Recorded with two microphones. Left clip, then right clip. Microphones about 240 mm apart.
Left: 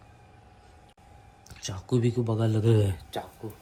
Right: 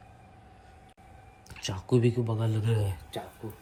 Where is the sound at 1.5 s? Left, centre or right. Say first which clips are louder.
Right 2 dB; centre.